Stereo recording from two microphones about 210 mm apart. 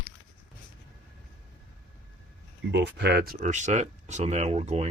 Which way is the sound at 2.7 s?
55° right (ahead or behind).